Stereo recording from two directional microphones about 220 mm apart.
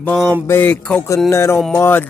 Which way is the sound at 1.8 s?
10° left (ahead or behind).